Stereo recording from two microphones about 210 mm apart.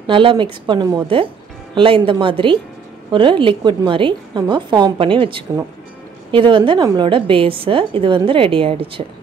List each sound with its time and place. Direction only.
0.0 s a woman's voice: 25° right (ahead or behind)